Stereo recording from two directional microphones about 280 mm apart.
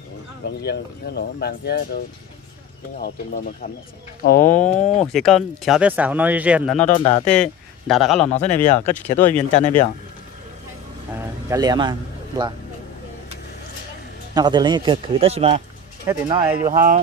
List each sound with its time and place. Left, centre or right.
0.6 s speech: left
3.0 s speech: left
4.5 s speech: centre
7.0 s speech: centre
7.2 s speech: centre
8.3 s speech: left
8.9 s speech: centre
11.4 s a man's voice: centre
14.3 s a man's voice: centre
16.4 s speech: centre